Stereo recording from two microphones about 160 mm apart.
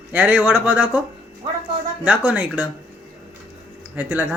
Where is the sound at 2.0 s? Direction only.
10° right (ahead or behind).